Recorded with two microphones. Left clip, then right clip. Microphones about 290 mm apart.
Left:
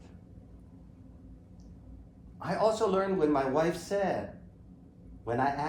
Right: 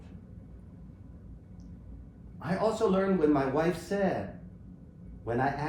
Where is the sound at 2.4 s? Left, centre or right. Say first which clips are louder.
Left 1 dB; centre.